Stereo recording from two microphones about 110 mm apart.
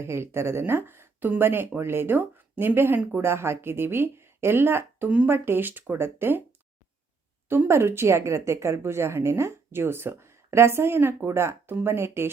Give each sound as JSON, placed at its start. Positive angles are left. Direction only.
{"t": 0.0, "sound": "a woman's voice", "side_deg": -25}
{"t": 7.5, "sound": "a woman's voice", "side_deg": -20}